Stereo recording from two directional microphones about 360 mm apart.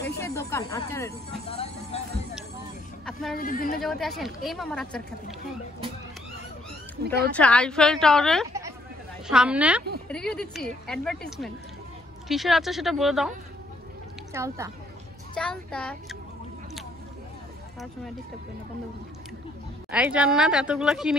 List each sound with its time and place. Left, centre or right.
0.2 s speech: centre
3.1 s speech: centre
3.3 s speech: left
3.8 s speech: centre
7.2 s speech: centre
14.3 s speech: centre
15.3 s speech: centre
19.9 s speech: centre